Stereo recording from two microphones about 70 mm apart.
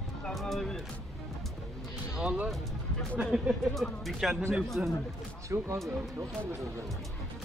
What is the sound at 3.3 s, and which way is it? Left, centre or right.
Speech, centre.